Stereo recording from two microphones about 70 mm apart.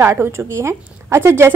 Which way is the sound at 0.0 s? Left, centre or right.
Right.